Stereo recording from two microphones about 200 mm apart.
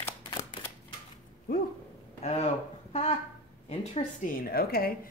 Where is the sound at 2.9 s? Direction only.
30° left (ahead or behind).